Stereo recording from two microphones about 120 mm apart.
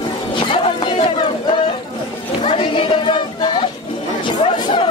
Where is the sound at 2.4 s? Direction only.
50° left (ahead or behind).